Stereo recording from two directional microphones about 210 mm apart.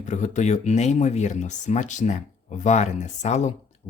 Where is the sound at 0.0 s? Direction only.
35° left (ahead or behind).